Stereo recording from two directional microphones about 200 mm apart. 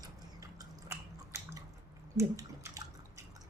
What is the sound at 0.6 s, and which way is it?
Biting, 15° right (ahead or behind).